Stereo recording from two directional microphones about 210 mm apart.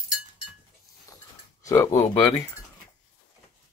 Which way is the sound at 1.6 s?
15° left (ahead or behind).